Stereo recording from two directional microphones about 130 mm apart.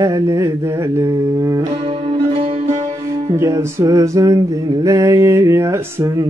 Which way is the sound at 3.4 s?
20° right (ahead or behind).